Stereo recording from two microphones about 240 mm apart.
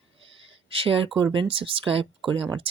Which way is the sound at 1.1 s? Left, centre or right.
Centre.